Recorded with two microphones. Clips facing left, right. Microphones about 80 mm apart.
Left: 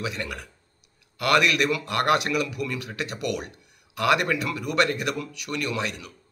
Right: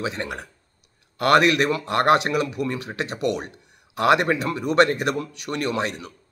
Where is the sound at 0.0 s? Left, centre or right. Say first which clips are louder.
Right 3 dB; right.